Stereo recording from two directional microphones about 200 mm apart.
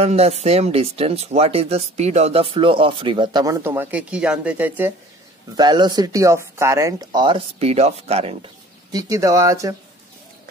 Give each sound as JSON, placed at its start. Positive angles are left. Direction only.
{"t": 0.0, "sound": "speech", "side_deg": -30}
{"t": 5.6, "sound": "speech", "side_deg": -20}
{"t": 8.9, "sound": "speech", "side_deg": -15}